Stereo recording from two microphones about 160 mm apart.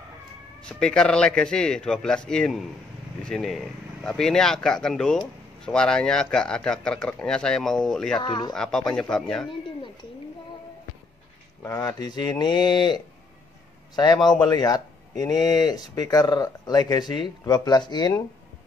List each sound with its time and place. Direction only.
0.6 s speech: 5° left (ahead or behind)
8.2 s speech: 30° left (ahead or behind)
8.5 s speech: 5° left (ahead or behind)
11.6 s speech: 20° left (ahead or behind)